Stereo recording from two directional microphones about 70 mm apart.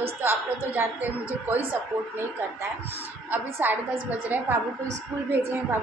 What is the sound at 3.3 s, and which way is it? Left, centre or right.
A woman's voice, right.